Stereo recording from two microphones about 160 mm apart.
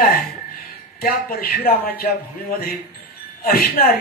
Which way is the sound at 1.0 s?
65° left (ahead or behind).